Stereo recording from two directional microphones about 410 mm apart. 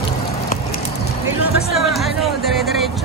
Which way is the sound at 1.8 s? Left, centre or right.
Centre.